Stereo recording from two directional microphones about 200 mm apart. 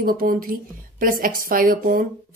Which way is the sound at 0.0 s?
45° right (ahead or behind).